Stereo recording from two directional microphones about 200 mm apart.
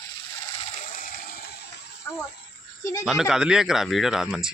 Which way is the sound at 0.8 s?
45° left (ahead or behind).